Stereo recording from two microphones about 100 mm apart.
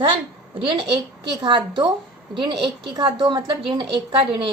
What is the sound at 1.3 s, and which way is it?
A woman's voice, 50° right (ahead or behind).